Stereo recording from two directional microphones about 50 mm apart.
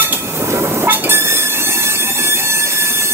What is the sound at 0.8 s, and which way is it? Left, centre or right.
Train, right.